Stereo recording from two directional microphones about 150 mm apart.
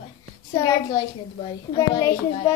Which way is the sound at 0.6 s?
25° left (ahead or behind).